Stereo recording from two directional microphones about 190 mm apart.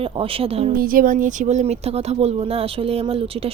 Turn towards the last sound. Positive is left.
turn(degrees=-30)  # may be behind; listen again after turning